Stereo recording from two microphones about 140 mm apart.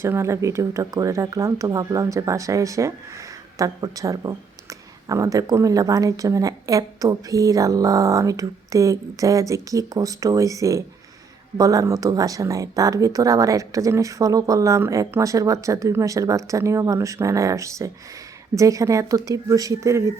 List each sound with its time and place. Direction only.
0.0 s speech: 20° right (ahead or behind)